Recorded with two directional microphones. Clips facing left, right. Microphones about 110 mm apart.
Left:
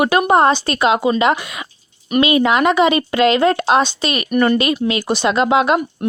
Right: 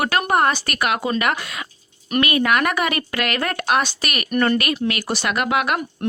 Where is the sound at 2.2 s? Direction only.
20° left (ahead or behind).